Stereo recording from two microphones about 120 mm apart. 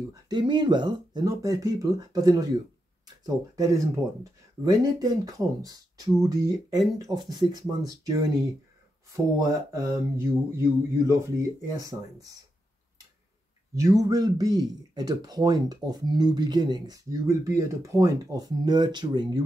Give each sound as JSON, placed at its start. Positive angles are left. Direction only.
{"t": 0.3, "sound": "speech", "side_deg": -40}
{"t": 1.2, "sound": "speech", "side_deg": -25}
{"t": 4.2, "sound": "speech", "side_deg": -30}
{"t": 13.7, "sound": "speech", "side_deg": -25}